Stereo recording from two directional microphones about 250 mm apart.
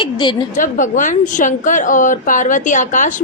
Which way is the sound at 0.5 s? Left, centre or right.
Left.